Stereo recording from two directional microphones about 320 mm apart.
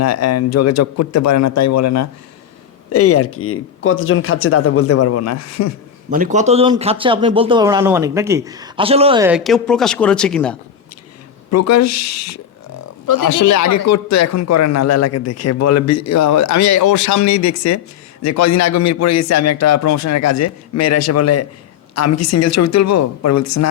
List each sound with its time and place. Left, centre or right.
0.0 s a man's voice: left
2.9 s speech: left
6.1 s speech: right; by 10.6 s centre
11.5 s a man's voice: left
13.1 s a man's voice: left